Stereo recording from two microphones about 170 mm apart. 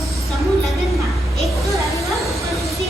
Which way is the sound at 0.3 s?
Centre (ahead or behind).